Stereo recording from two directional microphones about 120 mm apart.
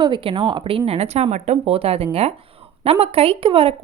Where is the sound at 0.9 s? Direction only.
60° right (ahead or behind).